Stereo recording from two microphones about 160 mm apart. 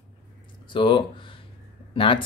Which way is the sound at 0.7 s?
30° left (ahead or behind).